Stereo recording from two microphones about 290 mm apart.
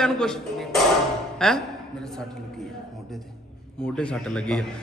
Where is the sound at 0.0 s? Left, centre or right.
Centre.